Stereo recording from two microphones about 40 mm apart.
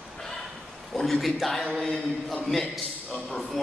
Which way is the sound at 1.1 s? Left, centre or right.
Centre.